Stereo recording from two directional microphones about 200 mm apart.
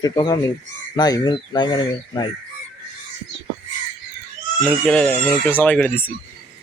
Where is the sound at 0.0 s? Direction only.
20° left (ahead or behind).